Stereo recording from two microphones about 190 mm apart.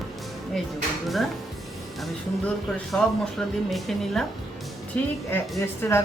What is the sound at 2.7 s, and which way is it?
A woman's voice, centre (ahead or behind).